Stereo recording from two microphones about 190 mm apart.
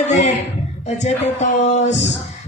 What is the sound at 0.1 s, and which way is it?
A man's voice, 35° left (ahead or behind).